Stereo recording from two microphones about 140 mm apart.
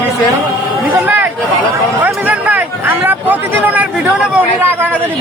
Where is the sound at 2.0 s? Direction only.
10° right (ahead or behind).